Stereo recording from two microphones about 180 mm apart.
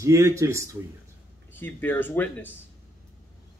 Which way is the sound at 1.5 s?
10° left (ahead or behind).